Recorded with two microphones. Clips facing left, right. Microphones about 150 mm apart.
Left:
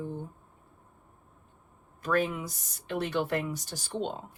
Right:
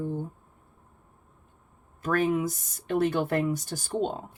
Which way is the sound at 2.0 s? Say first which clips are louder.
Right 4 dB; 45° right (ahead or behind).